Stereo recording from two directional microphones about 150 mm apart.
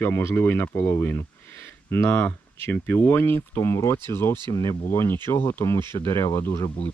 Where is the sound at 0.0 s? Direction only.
15° left (ahead or behind).